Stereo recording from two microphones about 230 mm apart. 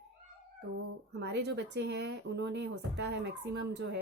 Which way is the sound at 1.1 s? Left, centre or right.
Right.